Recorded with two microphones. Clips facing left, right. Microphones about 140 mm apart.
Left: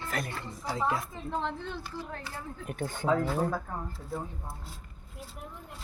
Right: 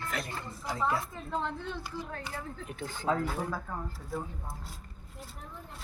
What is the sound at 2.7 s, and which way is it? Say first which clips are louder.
Speech: left 6 dB; 50° left (ahead or behind).